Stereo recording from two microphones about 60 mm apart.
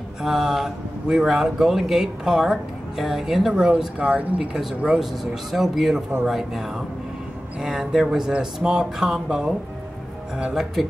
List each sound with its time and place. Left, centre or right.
0.2 s speech: centre; by 4.5 s right
4.6 s speech: centre